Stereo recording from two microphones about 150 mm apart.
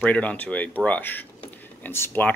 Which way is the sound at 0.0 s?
10° left (ahead or behind).